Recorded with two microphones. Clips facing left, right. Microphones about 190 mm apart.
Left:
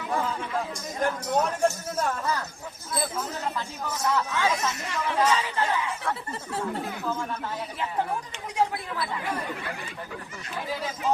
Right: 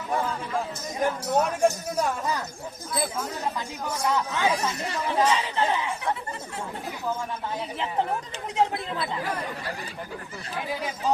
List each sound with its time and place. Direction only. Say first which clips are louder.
0.5 s a man's voice: right 1 dB; 10° right (ahead or behind)
3.8 s a man's voice: right 1 dB; 15° right (ahead or behind)
4.8 s speech: right 1 dB; 35° right (ahead or behind)
5.1 s a man's voice: right 1 dB; 15° right (ahead or behind)
8.5 s speech: right 1 dB; 25° right (ahead or behind)